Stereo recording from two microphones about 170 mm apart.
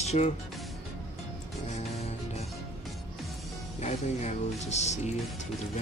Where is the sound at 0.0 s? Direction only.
40° left (ahead or behind).